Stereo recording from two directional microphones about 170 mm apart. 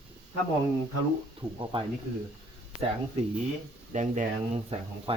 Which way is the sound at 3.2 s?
40° right (ahead or behind).